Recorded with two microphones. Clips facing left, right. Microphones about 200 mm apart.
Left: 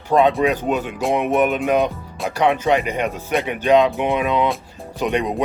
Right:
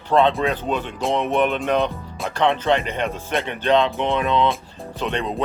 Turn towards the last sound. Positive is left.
turn(degrees=15)  # may be behind; listen again after turning